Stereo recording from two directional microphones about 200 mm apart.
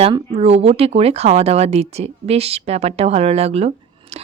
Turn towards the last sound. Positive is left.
turn(degrees=-30)  # may be behind; listen again after turning